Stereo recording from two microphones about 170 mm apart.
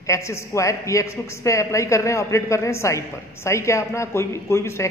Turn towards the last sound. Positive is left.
turn(degrees=15)  # may be behind; listen again after turning